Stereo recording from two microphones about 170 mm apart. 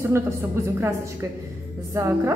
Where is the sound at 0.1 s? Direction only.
15° right (ahead or behind).